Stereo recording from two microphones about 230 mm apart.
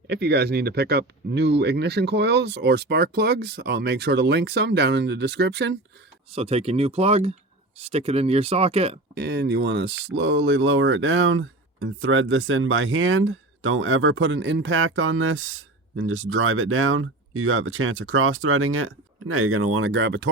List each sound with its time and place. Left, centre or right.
0.1 s speech: right
6.3 s speech: right
9.1 s speech: right